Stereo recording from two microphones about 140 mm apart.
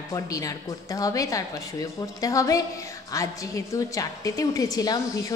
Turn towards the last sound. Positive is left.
turn(degrees=25)  # may be behind; listen again after turning